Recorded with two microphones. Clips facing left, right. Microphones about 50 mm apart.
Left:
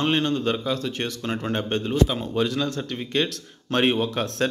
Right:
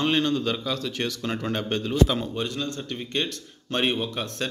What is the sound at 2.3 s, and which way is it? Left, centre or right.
A man's voice, left.